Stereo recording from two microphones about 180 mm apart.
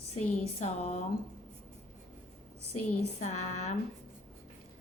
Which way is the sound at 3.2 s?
40° left (ahead or behind).